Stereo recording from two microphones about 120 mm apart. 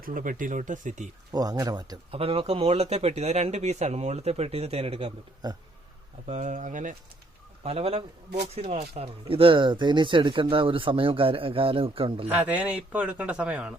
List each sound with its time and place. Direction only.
0.2 s speech: 90° right
1.3 s speech: 30° right (ahead or behind)
2.0 s speech: 55° right (ahead or behind)
6.2 s speech: 75° right (ahead or behind); by 6.9 s 90° right
7.6 s speech: 55° right (ahead or behind)
12.3 s speech: 10° right (ahead or behind)